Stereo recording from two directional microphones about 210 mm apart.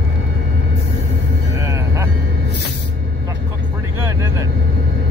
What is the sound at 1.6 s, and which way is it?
Music, 15° right (ahead or behind).